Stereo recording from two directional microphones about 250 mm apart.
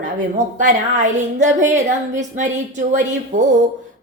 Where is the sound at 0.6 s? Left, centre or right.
Right.